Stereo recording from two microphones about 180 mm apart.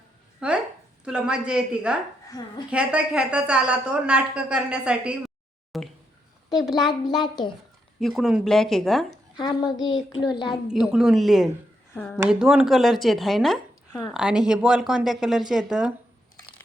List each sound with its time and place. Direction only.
0.3 s a sound: 5° right (ahead or behind)
1.0 s a woman's voice: 5° right (ahead or behind)
7.9 s a woman's voice: centre (ahead or behind)
9.9 s a child's voice: 25° left (ahead or behind)
10.4 s a woman's voice: 5° right (ahead or behind)